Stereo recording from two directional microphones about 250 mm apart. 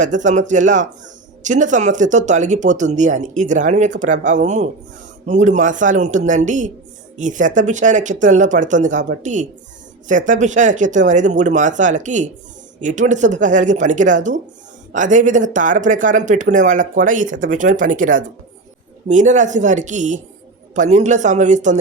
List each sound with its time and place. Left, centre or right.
0.0 s speech: right